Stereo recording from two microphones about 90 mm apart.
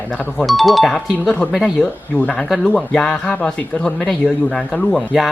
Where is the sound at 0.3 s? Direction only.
Centre (ahead or behind).